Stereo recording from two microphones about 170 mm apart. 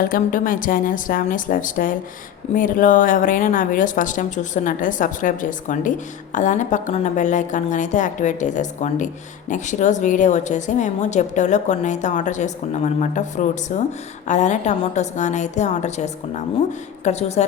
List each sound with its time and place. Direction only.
0.0 s a woman's voice: 55° left (ahead or behind); by 17.4 s 40° left (ahead or behind)